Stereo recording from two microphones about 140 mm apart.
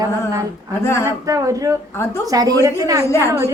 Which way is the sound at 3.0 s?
20° left (ahead or behind).